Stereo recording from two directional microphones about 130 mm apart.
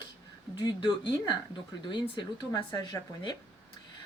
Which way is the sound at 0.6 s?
35° left (ahead or behind).